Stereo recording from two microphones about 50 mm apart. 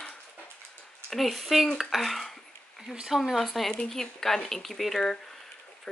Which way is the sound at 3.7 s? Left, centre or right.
Centre.